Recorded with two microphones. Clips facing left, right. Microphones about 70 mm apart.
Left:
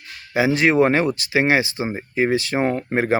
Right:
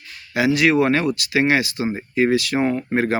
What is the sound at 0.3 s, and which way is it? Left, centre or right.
Speech, left.